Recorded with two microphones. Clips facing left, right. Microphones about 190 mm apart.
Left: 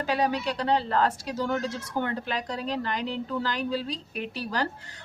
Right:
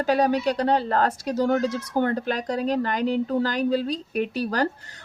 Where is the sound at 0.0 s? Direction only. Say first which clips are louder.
Right 6 dB; 45° right (ahead or behind).